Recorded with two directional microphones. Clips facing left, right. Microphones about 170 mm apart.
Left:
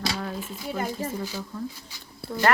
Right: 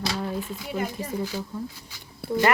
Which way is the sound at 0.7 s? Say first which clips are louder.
Left 1 dB; 15° right (ahead or behind).